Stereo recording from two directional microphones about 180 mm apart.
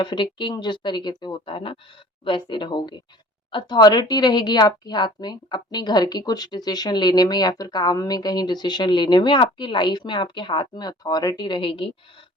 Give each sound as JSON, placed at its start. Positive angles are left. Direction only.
{"t": 0.0, "sound": "speech", "side_deg": 25}